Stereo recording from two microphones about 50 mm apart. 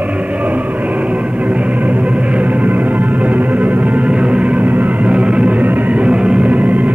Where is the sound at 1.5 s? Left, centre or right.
Right.